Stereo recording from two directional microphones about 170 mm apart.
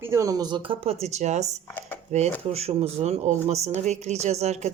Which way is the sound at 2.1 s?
40° right (ahead or behind).